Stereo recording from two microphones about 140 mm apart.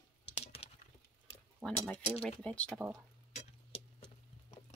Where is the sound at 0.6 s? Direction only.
45° left (ahead or behind).